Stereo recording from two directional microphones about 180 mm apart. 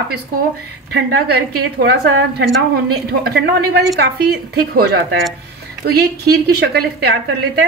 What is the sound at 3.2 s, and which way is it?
A woman's voice, 60° right (ahead or behind).